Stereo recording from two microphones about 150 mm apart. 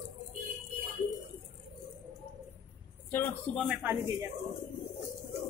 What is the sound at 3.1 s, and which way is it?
Speech, 10° left (ahead or behind).